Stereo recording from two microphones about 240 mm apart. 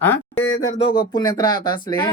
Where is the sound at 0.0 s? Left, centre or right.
Centre.